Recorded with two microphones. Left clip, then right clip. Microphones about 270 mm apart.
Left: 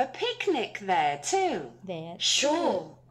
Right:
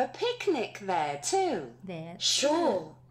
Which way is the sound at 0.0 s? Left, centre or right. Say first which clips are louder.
Left 1 dB; centre.